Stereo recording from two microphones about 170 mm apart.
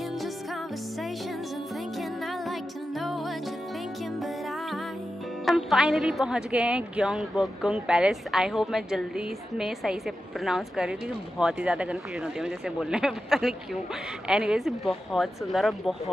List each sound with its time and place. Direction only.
5.4 s speech: centre (ahead or behind)